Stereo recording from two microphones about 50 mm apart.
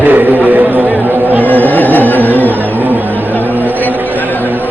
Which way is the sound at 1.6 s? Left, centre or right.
Left.